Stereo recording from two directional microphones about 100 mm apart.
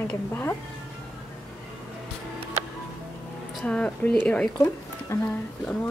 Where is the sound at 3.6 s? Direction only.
10° left (ahead or behind); by 5.3 s 30° left (ahead or behind).